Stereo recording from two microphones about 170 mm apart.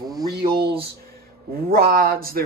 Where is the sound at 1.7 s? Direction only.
65° right (ahead or behind).